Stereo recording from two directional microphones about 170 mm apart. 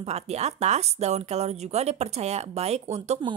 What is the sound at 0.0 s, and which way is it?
Speech, 40° right (ahead or behind).